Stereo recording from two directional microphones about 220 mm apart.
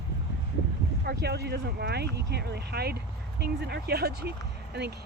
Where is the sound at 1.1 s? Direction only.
50° right (ahead or behind).